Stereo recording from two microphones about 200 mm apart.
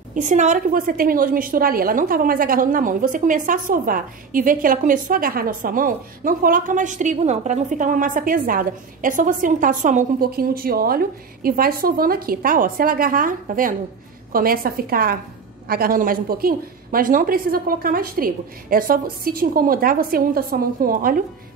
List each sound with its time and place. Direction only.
0.1 s a woman's voice: 40° right (ahead or behind)